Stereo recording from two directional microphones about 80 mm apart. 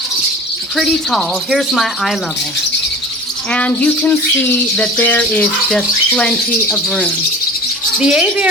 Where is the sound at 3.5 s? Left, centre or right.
Centre.